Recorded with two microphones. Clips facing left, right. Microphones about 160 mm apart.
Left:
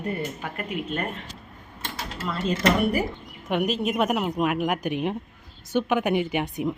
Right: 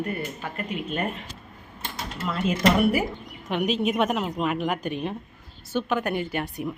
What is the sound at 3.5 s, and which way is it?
Speech, 5° left (ahead or behind).